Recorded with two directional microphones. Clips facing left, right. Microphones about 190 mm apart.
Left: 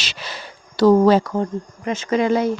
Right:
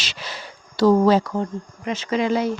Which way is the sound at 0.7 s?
60° left (ahead or behind).